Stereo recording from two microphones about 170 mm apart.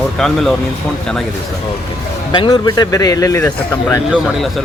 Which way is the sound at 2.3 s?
25° left (ahead or behind).